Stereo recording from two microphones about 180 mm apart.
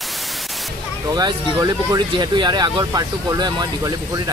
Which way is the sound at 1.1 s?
20° right (ahead or behind).